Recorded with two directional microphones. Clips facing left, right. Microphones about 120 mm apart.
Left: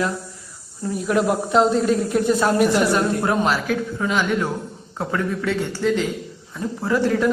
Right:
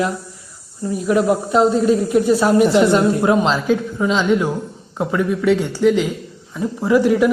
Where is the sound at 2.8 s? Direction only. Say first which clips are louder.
Right 5 dB; 20° right (ahead or behind).